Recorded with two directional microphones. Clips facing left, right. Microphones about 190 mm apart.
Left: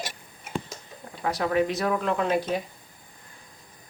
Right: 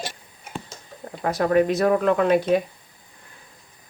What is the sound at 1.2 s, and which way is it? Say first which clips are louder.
Speech: right 5 dB; 45° right (ahead or behind).